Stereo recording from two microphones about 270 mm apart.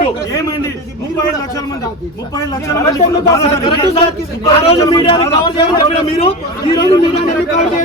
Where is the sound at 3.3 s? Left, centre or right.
Centre.